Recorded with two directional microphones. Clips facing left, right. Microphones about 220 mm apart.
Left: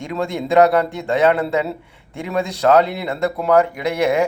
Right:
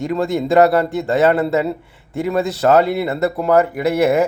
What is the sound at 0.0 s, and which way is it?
Speech, 5° right (ahead or behind).